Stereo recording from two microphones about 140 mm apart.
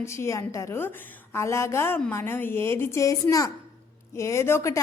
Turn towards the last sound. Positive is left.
turn(degrees=20)  # may be behind; listen again after turning